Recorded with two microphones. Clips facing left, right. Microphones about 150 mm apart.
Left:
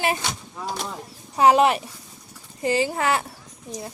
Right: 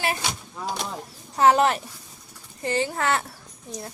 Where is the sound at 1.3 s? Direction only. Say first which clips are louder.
Left 2 dB; 10° left (ahead or behind).